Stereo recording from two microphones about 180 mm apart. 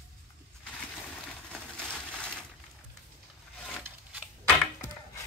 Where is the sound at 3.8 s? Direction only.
10° right (ahead or behind).